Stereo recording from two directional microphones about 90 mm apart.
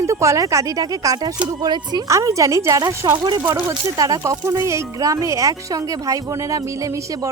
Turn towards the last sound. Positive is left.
turn(degrees=-40)  # may be behind; listen again after turning